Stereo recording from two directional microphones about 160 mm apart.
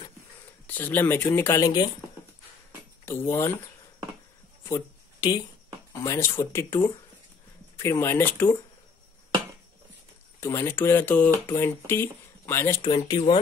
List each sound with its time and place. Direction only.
0.7 s speech: 10° left (ahead or behind)
3.1 s speech: 15° left (ahead or behind)
4.6 s a sound: 20° left (ahead or behind)
6.0 s speech: 15° left (ahead or behind)
10.4 s speech: 15° left (ahead or behind)